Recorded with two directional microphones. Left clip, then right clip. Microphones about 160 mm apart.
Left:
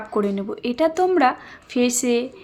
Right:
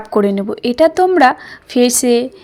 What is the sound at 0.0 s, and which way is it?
A woman's voice, 40° right (ahead or behind).